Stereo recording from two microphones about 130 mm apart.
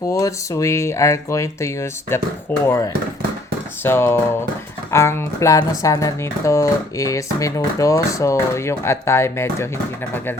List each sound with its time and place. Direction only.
0.1 s speech: 25° left (ahead or behind)